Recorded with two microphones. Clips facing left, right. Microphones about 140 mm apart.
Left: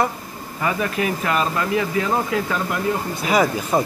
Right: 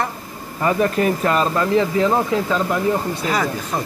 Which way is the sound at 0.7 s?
40° right (ahead or behind).